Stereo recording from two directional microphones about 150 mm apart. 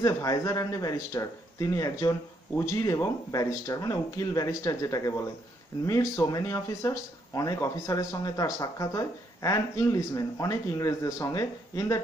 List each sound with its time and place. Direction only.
0.0 s speech: 25° left (ahead or behind)